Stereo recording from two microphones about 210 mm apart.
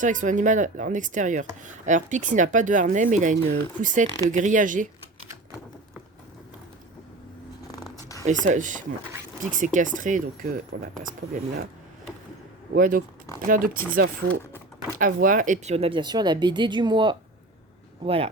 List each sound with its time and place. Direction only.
0.0 s speech: 35° right (ahead or behind)
8.2 s speech: 35° right (ahead or behind)
12.7 s speech: 40° right (ahead or behind)